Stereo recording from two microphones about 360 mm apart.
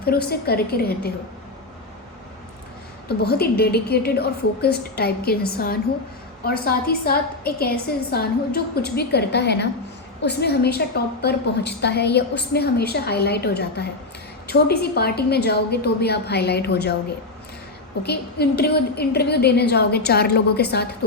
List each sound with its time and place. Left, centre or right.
0.0 s a woman's voice: left
3.1 s a woman's voice: left
18.0 s a woman's voice: left